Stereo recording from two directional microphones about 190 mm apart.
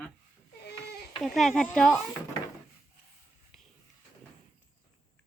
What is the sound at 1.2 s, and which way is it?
Speech, centre (ahead or behind).